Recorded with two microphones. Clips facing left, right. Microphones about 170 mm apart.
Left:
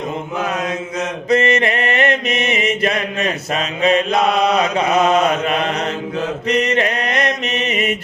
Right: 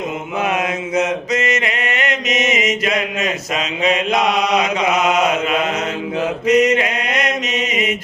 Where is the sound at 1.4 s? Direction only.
35° left (ahead or behind).